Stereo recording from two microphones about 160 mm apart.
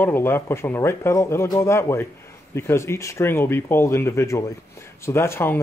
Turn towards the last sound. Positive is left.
turn(degrees=15)  # may be behind; listen again after turning